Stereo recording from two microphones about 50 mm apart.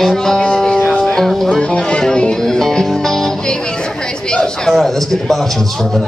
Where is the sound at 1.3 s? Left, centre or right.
Centre.